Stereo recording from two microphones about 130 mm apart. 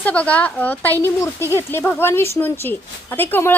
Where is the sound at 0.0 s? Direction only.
10° left (ahead or behind).